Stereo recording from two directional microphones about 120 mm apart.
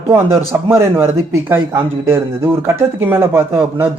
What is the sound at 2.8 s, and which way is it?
Speech, 20° right (ahead or behind).